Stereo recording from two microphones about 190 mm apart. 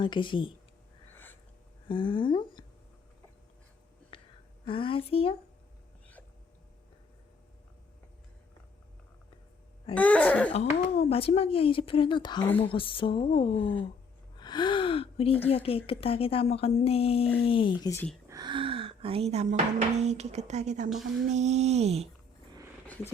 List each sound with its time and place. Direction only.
0.0 s speech: 25° left (ahead or behind)
1.1 s a sound: 10° left (ahead or behind)
1.9 s speech: 25° left (ahead or behind)
4.1 s a sound: 25° left (ahead or behind)
4.6 s speech: 30° left (ahead or behind)
9.9 s throat clearing: 10° left (ahead or behind)
10.8 s a woman's voice: 35° left (ahead or behind)
18.3 s speech: 20° right (ahead or behind); by 20.9 s 40° right (ahead or behind)
21.3 s a sound: 35° right (ahead or behind)